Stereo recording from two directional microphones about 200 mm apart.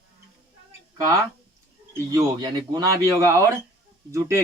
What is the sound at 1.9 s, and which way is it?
Speech, 20° right (ahead or behind).